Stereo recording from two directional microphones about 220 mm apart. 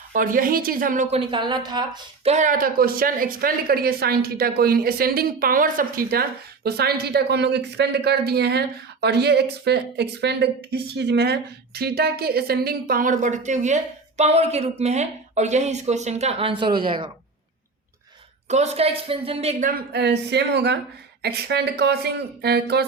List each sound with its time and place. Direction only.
0.1 s a woman's voice: 40° right (ahead or behind); by 2.3 s 20° right (ahead or behind)
2.3 s speech: 35° right (ahead or behind)
18.4 s speech: 30° right (ahead or behind)
19.9 s speech: 50° right (ahead or behind)